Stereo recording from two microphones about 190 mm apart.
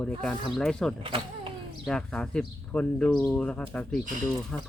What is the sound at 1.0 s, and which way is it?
Speech, 30° right (ahead or behind).